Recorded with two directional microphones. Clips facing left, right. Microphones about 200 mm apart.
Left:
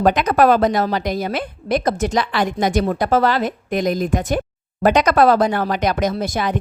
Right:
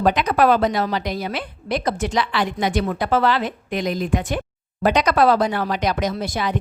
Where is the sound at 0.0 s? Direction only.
45° left (ahead or behind).